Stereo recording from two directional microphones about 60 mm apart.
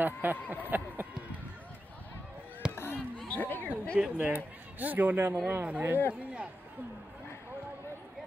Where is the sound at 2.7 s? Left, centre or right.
Left.